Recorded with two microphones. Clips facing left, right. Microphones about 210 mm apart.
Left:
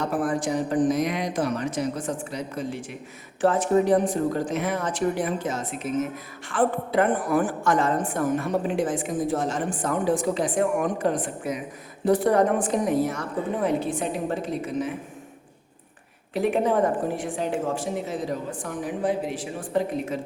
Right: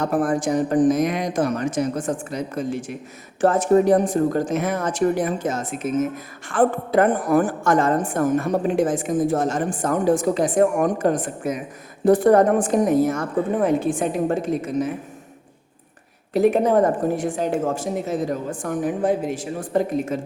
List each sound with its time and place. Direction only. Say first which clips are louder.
0.0 s a woman's voice: right 4 dB; 45° right (ahead or behind)
16.3 s a woman's voice: right 5 dB; 40° right (ahead or behind)